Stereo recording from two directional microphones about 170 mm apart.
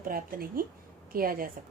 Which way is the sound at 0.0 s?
55° right (ahead or behind).